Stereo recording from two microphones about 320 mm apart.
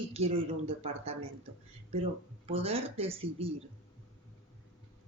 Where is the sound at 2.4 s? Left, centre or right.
Centre.